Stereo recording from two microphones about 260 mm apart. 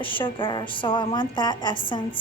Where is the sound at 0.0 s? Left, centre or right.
Centre.